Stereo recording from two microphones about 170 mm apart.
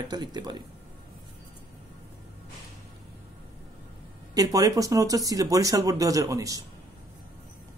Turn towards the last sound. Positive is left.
turn(degrees=-20)  # may be behind; listen again after turning